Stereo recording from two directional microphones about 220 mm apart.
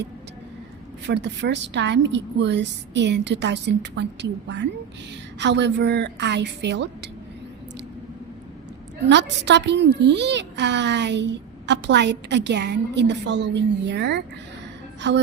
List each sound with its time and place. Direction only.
1.0 s a woman's voice: 50° right (ahead or behind)
9.0 s a woman's voice: 50° right (ahead or behind)